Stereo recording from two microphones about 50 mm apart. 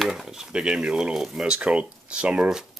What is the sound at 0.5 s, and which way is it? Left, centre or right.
Speech, centre.